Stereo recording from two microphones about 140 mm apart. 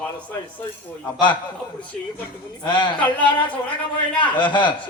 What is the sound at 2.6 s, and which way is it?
Speech, 30° left (ahead or behind).